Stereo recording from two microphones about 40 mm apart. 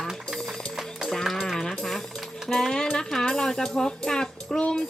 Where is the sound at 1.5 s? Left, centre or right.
Centre.